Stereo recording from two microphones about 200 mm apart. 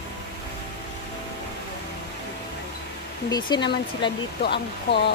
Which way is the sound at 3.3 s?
20° left (ahead or behind).